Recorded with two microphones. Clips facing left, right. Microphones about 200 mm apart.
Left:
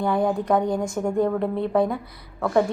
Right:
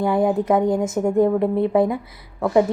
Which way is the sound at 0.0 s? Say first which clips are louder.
Right 3 dB; 20° right (ahead or behind).